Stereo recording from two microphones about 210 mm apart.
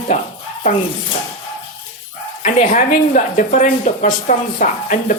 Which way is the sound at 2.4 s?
40° left (ahead or behind).